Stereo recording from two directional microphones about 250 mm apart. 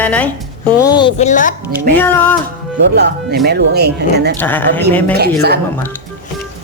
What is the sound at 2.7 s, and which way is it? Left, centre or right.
Speech, right.